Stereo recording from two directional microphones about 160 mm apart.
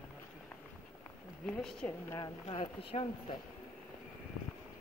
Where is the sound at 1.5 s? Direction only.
5° left (ahead or behind).